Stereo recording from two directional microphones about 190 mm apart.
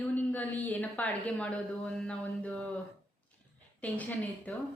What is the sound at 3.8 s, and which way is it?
Speech, 10° left (ahead or behind).